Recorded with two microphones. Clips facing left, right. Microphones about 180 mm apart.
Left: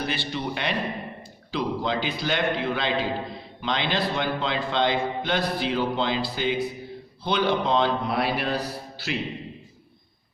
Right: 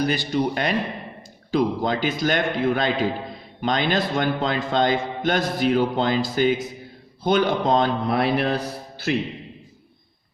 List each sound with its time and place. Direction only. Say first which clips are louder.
0.0 s a man's voice: right 7 dB; 40° right (ahead or behind)